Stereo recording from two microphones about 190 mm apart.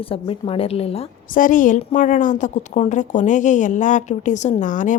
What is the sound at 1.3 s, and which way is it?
A woman's voice, 45° left (ahead or behind).